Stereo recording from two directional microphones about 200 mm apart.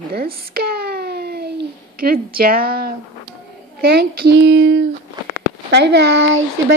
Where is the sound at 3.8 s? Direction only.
55° right (ahead or behind).